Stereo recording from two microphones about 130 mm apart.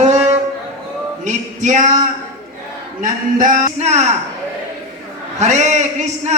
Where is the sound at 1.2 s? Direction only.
70° right (ahead or behind).